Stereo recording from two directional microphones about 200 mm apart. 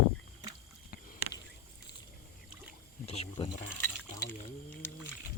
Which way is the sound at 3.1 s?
25° left (ahead or behind).